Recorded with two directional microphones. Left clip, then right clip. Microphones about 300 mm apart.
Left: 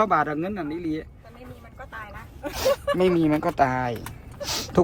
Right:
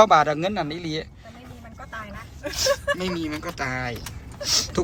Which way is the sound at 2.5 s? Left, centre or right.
Centre.